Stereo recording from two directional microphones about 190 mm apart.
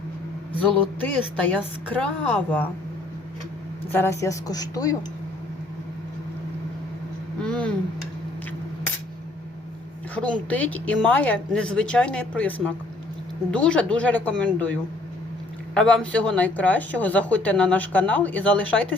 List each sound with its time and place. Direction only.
1.4 s speech: 10° left (ahead or behind)
3.9 s a woman's voice: 15° left (ahead or behind)
7.4 s a sound: 5° left (ahead or behind)
10.2 s speech: 5° left (ahead or behind)